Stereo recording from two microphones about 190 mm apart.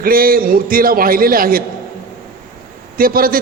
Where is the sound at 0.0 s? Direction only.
50° right (ahead or behind).